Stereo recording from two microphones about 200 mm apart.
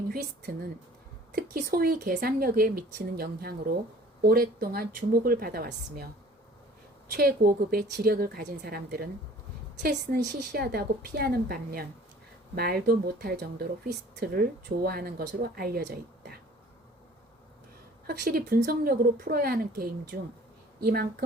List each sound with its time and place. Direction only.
0.1 s speech: 50° right (ahead or behind)
7.2 s speech: 50° right (ahead or behind)
10.5 s speech: 50° right (ahead or behind)
18.0 s speech: 50° right (ahead or behind)